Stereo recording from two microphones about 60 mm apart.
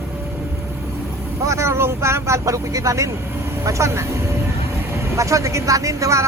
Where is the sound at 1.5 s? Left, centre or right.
Right.